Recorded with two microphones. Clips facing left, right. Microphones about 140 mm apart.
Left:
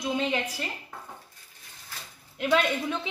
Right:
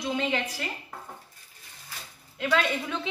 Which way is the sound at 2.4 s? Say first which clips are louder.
Left 2 dB; 15° left (ahead or behind).